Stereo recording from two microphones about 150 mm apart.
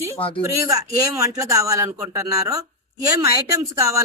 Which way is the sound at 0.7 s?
20° right (ahead or behind).